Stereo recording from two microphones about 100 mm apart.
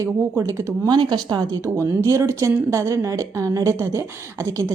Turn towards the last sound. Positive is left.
turn(degrees=-30)  # may be behind; listen again after turning